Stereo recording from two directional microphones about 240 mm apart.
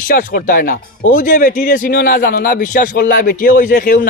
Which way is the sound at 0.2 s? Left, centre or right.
Left.